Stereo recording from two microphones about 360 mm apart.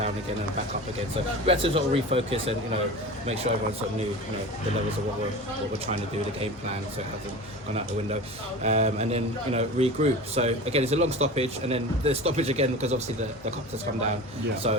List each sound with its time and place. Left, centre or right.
1.5 s a man's voice: centre
8.6 s a man's voice: centre
14.6 s a man's voice: centre